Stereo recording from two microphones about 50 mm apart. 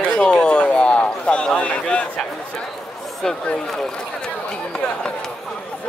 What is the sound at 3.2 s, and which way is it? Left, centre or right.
Speech, centre.